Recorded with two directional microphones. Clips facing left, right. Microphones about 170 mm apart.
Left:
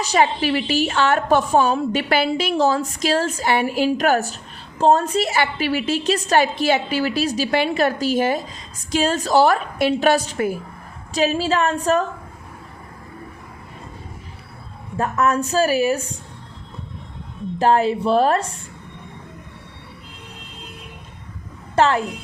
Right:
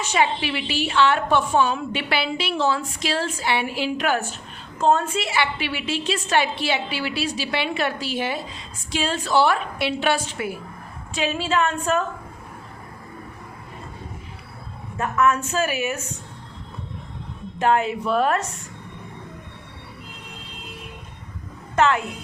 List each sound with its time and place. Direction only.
0.0 s a woman's voice: 40° left (ahead or behind)
14.9 s a woman's voice: 35° left (ahead or behind)
17.6 s a woman's voice: 35° left (ahead or behind)
21.8 s a woman's voice: 35° left (ahead or behind)